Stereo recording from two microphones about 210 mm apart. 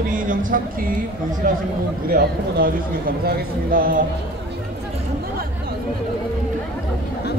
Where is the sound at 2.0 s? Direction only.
45° right (ahead or behind).